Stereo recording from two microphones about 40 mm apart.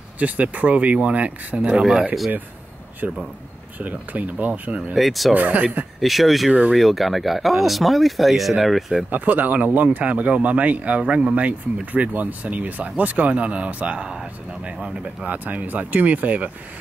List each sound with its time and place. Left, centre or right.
0.2 s speech: right
3.8 s speech: right
4.9 s speech: centre
5.3 s speech: right
5.9 s speech: centre
9.1 s speech: right
15.2 s speech: right